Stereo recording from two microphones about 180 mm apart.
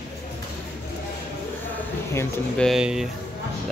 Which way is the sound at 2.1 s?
5° left (ahead or behind).